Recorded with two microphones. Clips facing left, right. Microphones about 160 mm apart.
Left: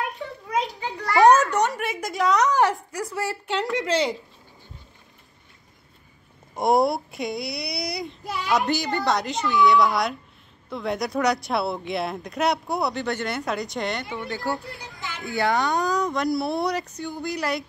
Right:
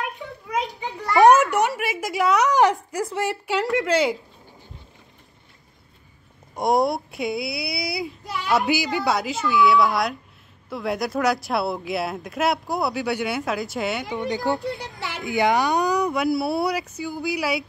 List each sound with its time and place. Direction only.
0.7 s a sound: 20° right (ahead or behind)
1.7 s a woman's voice: 5° right (ahead or behind)
2.5 s speech: 20° right (ahead or behind)
3.4 s a child's voice: centre (ahead or behind)
6.5 s a child's voice: centre (ahead or behind)
14.1 s speech: 20° right (ahead or behind)
14.8 s a child's voice: 75° right (ahead or behind)
15.2 s speech: 15° right (ahead or behind)